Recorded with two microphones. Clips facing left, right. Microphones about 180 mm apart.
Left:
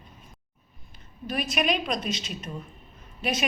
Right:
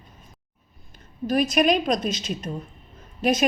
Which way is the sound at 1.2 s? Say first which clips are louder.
Right 7 dB; 40° right (ahead or behind).